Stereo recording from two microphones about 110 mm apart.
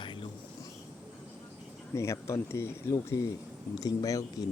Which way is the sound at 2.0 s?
25° left (ahead or behind).